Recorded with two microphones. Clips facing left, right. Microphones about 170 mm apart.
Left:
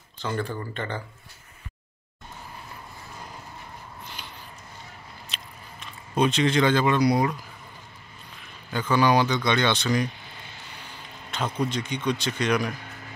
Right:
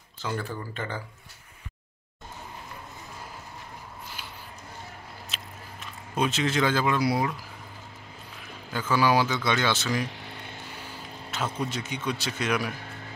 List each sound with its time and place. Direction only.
0.2 s a man's voice: 5° right (ahead or behind)
4.2 s a sound: 5° right (ahead or behind)
5.3 s biting: 5° right (ahead or behind)
8.7 s a man's voice: 5° right (ahead or behind)
10.0 s vehicle: 70° right (ahead or behind)
11.2 s a sound: 5° right (ahead or behind)
11.7 s a man's voice: 5° right (ahead or behind)